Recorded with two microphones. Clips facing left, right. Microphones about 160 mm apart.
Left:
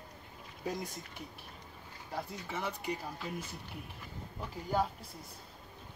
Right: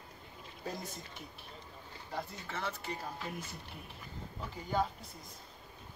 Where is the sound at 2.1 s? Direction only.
10° left (ahead or behind).